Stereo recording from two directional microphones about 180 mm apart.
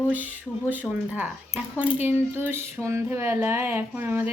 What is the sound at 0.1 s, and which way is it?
A woman's voice, 10° right (ahead or behind).